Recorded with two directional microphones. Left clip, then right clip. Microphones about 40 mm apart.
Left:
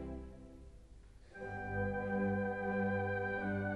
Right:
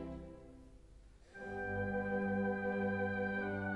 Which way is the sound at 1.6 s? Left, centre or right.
Right.